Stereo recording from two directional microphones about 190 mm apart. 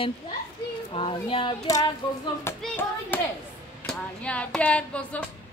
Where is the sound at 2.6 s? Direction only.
10° left (ahead or behind).